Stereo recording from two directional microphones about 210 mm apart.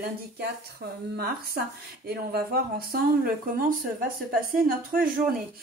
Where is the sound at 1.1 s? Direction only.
45° right (ahead or behind).